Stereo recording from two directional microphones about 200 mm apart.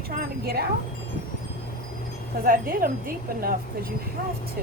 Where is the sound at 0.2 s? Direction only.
50° right (ahead or behind).